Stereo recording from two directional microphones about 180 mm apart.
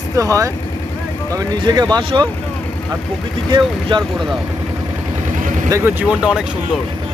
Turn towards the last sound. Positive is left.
turn(degrees=-5)  # may be behind; listen again after turning